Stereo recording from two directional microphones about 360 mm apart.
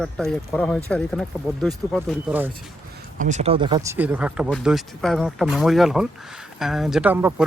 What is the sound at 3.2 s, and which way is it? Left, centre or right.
Speech, centre.